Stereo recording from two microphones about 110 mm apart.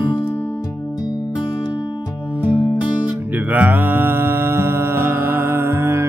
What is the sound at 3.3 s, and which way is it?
Music, 15° right (ahead or behind).